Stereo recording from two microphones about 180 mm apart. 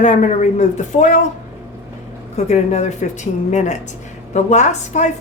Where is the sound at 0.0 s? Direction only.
40° left (ahead or behind).